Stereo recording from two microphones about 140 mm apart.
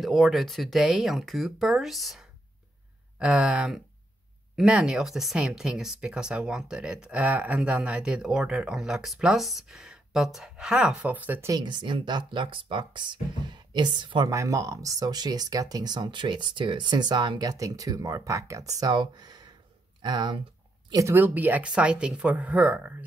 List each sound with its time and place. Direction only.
0.0 s speech: centre (ahead or behind)
11.5 s speech: 35° right (ahead or behind)
14.3 s speech: 20° right (ahead or behind)
20.9 s speech: 20° right (ahead or behind)